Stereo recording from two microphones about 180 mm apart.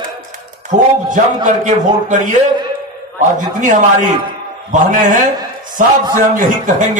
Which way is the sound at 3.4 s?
45° right (ahead or behind).